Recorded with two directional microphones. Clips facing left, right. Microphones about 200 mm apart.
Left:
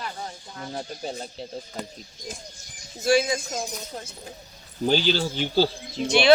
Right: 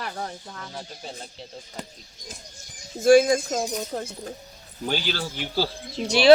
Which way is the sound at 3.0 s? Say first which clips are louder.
Right 6 dB; 50° right (ahead or behind).